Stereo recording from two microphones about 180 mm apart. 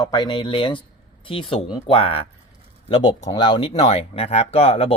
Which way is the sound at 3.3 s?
25° left (ahead or behind).